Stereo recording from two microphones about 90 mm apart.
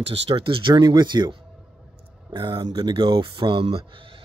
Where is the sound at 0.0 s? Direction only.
90° right; by 1.3 s 55° right (ahead or behind).